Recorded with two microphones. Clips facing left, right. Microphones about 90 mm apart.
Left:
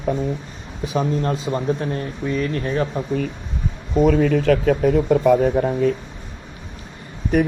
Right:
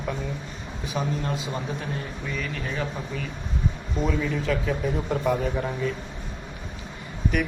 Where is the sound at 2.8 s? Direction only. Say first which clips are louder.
Left 9 dB; 45° left (ahead or behind).